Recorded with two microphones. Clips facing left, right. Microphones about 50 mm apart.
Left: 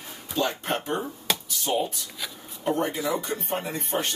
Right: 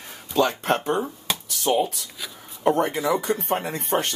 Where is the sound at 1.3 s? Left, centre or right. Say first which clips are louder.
Left 2 dB; centre.